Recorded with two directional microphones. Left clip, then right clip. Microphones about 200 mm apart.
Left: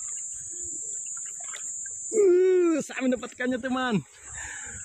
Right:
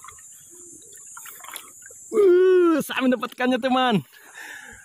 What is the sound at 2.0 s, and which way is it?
Speech, 55° right (ahead or behind).